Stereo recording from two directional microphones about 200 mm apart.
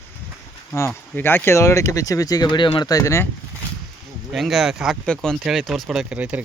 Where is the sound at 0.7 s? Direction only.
10° left (ahead or behind).